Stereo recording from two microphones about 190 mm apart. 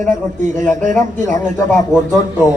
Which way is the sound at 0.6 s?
10° left (ahead or behind).